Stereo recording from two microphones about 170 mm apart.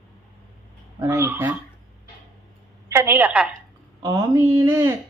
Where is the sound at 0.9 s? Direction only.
15° right (ahead or behind).